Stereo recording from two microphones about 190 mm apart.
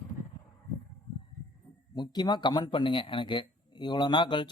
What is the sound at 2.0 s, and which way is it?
Speech, 20° left (ahead or behind).